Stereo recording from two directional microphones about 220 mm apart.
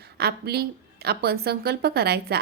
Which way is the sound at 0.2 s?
45° right (ahead or behind).